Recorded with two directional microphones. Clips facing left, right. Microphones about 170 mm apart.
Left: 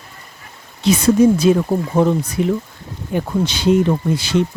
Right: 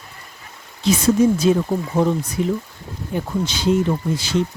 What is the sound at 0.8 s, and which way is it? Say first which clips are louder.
Speech: left 3 dB; 65° left (ahead or behind).